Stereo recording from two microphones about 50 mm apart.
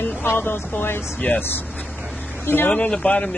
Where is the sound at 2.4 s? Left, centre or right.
Left.